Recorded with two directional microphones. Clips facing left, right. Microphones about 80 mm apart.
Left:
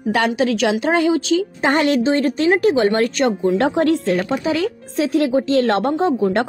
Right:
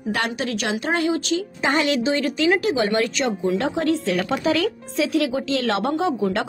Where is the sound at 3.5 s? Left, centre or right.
Left.